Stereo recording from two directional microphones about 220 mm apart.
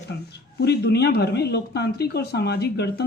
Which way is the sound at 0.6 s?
50° left (ahead or behind).